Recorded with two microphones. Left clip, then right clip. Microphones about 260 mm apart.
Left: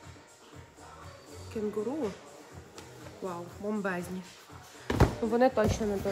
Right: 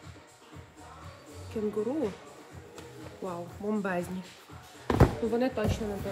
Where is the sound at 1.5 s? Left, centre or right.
Centre.